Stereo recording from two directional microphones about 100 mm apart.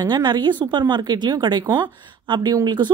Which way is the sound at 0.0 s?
50° right (ahead or behind).